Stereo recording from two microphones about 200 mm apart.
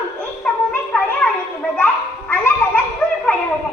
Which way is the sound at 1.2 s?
10° left (ahead or behind).